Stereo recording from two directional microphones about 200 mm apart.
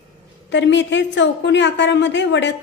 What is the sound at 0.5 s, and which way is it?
A woman's voice, 60° left (ahead or behind).